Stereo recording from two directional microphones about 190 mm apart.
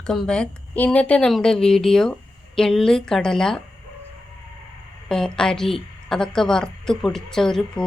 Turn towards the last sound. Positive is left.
turn(degrees=5)  # may be behind; listen again after turning